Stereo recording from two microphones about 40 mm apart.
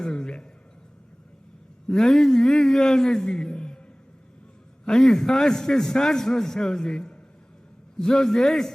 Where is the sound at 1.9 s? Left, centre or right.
Centre.